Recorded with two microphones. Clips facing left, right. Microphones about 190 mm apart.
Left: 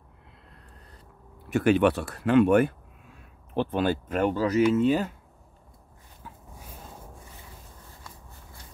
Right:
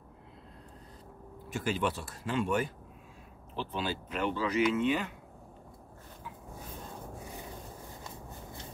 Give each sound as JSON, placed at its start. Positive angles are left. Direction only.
{"t": 1.5, "sound": "speech", "side_deg": 65}